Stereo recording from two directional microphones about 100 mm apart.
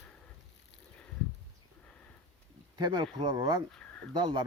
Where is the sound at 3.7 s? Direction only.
10° left (ahead or behind).